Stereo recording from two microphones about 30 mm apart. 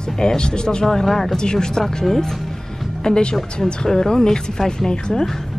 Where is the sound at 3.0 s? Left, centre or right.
Left.